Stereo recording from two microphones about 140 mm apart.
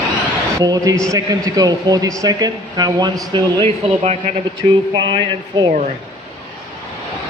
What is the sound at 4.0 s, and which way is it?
Speech, 50° right (ahead or behind).